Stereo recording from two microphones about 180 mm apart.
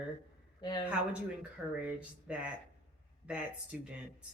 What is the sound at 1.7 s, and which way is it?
Speech, 5° right (ahead or behind).